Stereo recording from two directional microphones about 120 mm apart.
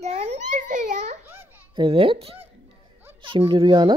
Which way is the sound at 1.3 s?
15° right (ahead or behind).